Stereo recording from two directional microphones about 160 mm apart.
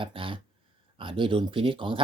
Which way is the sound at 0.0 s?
35° right (ahead or behind).